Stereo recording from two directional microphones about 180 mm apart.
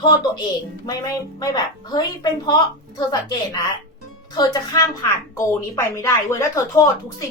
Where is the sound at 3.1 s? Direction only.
20° left (ahead or behind).